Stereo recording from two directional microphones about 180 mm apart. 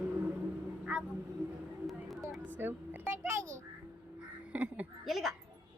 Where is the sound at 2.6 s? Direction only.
10° right (ahead or behind).